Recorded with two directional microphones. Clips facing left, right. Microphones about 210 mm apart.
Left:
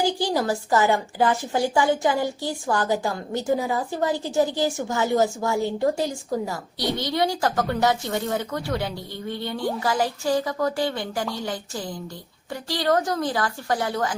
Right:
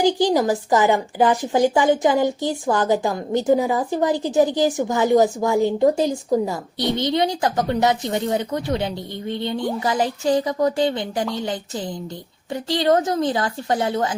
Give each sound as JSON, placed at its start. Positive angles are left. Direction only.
{"t": 0.0, "sound": "a woman's voice", "side_deg": -20}